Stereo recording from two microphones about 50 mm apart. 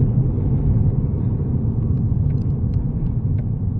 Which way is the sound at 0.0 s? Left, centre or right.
Left.